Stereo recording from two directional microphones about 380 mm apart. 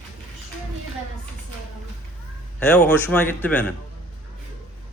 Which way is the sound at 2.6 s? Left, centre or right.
Centre.